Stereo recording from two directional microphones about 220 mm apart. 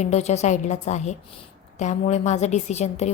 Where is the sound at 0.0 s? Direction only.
30° left (ahead or behind).